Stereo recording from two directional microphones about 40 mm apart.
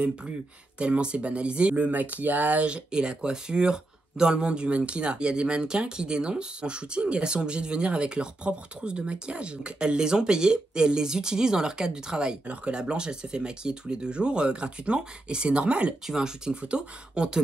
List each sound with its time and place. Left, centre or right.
0.7 s speech: right
2.7 s speech: right
16.1 s speech: centre